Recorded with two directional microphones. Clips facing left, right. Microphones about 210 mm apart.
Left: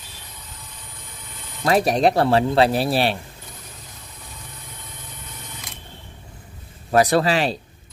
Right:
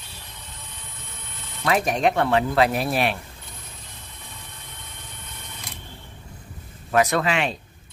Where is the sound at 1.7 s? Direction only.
35° left (ahead or behind).